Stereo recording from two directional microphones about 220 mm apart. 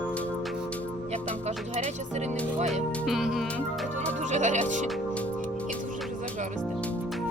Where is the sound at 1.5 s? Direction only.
30° right (ahead or behind).